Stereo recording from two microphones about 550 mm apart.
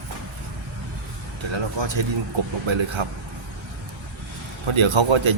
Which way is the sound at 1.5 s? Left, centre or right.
Right.